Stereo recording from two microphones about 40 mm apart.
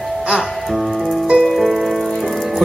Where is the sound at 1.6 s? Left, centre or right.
Centre.